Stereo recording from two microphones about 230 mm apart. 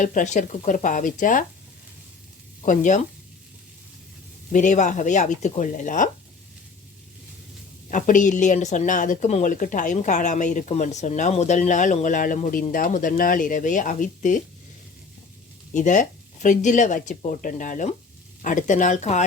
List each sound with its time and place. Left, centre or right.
0.0 s speech: left
2.6 s speech: left
4.5 s speech: left
7.9 s speech: left
15.7 s speech: left